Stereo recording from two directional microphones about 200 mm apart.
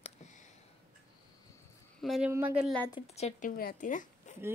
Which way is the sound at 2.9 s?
30° left (ahead or behind).